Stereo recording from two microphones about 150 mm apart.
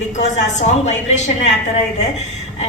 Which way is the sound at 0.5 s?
50° left (ahead or behind).